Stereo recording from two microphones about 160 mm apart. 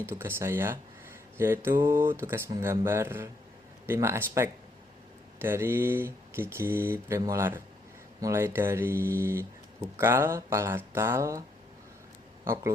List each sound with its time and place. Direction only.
0.0 s speech: 15° right (ahead or behind)